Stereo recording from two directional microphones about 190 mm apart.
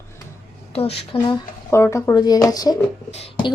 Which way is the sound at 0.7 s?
30° left (ahead or behind).